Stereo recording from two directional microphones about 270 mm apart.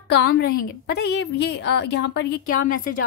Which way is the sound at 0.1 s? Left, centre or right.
Left.